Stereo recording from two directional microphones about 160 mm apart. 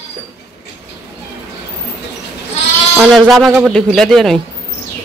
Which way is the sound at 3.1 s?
Centre (ahead or behind).